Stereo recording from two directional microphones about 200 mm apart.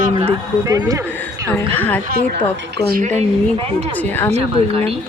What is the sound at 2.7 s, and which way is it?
Speech, 50° right (ahead or behind).